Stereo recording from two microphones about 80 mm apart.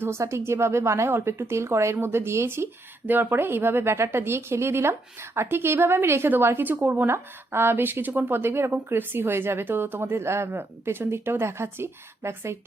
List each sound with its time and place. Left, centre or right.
0.0 s speech: right